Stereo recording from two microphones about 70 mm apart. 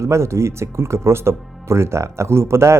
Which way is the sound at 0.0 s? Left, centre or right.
Right.